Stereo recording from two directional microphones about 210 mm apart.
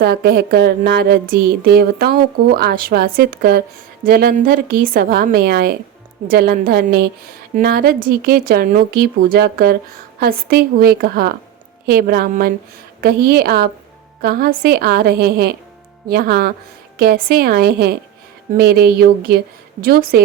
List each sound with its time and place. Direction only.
0.0 s speech: 50° right (ahead or behind)